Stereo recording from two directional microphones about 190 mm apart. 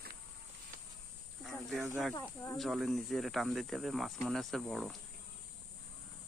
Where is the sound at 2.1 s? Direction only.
15° left (ahead or behind).